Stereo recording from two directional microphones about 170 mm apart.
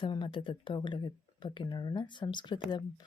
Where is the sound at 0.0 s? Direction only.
30° left (ahead or behind).